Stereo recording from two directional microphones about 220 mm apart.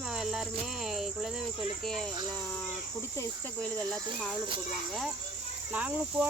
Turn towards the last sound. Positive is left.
turn(degrees=-5)  # may be behind; listen again after turning